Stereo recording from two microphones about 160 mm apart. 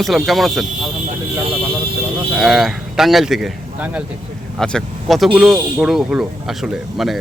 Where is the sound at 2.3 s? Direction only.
Centre (ahead or behind).